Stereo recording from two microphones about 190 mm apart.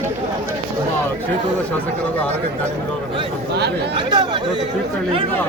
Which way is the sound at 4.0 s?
25° right (ahead or behind).